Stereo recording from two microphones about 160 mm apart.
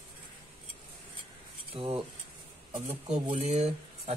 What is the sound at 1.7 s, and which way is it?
Speech, 35° right (ahead or behind).